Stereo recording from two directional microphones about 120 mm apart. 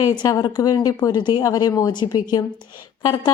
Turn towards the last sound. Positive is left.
turn(degrees=30)  # may be behind; listen again after turning